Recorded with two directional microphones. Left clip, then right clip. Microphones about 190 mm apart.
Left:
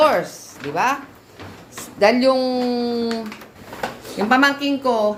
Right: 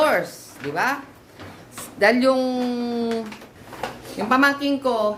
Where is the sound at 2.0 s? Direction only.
Centre (ahead or behind).